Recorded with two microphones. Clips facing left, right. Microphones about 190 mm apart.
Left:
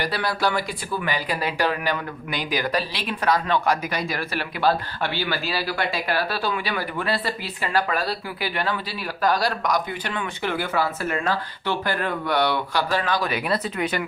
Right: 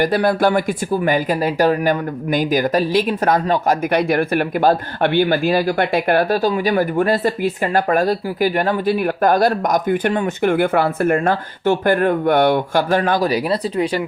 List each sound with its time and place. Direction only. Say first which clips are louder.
0.0 s speech: right 9 dB; 50° right (ahead or behind); by 14.0 s 30° right (ahead or behind)